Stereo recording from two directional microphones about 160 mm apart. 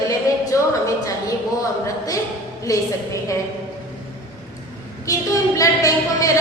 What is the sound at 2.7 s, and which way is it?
Speech, 20° left (ahead or behind).